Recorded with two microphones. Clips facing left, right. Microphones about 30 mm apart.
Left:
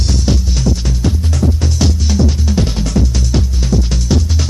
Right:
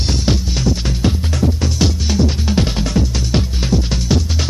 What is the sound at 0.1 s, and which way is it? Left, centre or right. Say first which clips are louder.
Music: left 1 dB; right.